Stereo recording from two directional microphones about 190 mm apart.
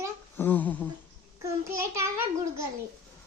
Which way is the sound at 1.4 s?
15° right (ahead or behind).